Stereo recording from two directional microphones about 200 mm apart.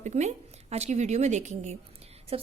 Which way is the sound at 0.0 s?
35° right (ahead or behind).